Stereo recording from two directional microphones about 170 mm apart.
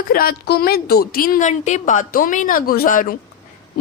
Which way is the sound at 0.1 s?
60° left (ahead or behind).